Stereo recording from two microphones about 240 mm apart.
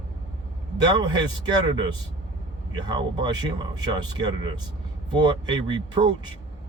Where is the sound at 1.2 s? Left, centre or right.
Centre.